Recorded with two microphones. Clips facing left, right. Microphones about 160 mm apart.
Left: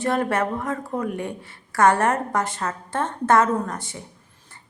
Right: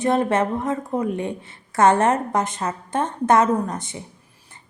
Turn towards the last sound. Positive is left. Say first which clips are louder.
# right 3 dB
turn(degrees=-20)  # may be behind; listen again after turning